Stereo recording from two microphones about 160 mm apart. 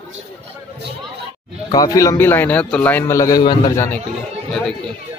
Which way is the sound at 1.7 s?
20° left (ahead or behind).